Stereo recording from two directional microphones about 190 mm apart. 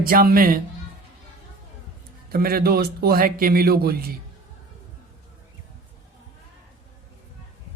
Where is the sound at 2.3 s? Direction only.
50° right (ahead or behind).